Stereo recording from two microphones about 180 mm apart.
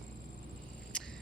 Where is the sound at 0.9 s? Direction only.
5° left (ahead or behind).